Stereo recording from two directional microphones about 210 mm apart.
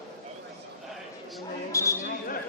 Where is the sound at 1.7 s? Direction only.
15° left (ahead or behind).